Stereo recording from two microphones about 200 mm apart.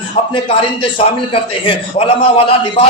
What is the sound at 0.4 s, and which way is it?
A man's voice, 30° left (ahead or behind).